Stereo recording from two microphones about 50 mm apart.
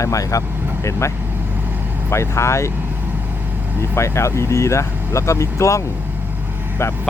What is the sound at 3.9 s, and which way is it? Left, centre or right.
Speech, left.